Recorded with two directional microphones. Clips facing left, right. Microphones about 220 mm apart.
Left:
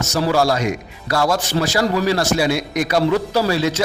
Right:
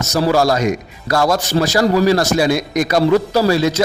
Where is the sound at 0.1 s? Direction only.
40° right (ahead or behind).